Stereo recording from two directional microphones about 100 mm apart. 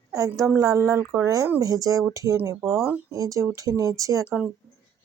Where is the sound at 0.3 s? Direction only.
30° right (ahead or behind).